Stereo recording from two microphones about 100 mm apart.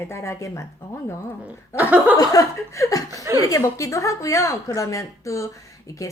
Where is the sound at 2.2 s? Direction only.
35° left (ahead or behind).